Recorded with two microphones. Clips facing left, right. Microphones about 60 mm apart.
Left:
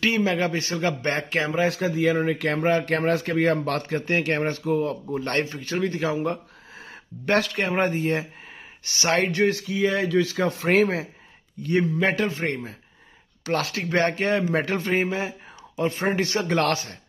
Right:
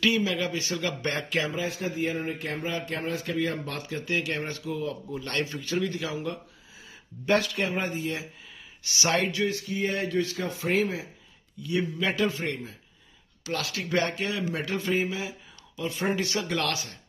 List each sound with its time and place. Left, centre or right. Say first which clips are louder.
0.0 s speech: left 3 dB; left
1.5 s speech: left 8 dB; left
2.6 s speech: left 11 dB; left
9.7 s speech: left 6 dB; left
10.2 s speech: left 6 dB; left
11.6 s speech: left 6 dB; left
12.2 s speech: left 2 dB; left